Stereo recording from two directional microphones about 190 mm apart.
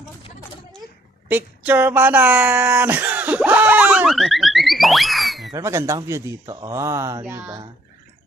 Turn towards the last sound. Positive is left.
turn(degrees=-20)  # may be behind; listen again after turning